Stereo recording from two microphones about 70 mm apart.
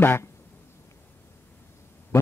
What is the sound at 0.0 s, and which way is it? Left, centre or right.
Speech, left.